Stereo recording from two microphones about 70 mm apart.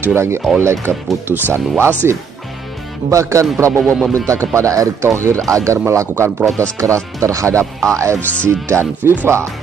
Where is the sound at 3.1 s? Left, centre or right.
Right.